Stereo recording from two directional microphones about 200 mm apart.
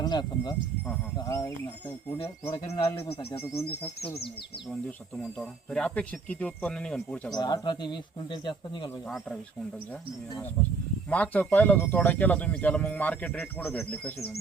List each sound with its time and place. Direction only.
0.0 s speech: 20° left (ahead or behind)
2.7 s speech: 10° left (ahead or behind)
3.1 s speech: 30° left (ahead or behind)
5.7 s speech: 5° left (ahead or behind)
7.3 s speech: 20° left (ahead or behind)
9.0 s speech: centre (ahead or behind)
11.1 s speech: 10° left (ahead or behind)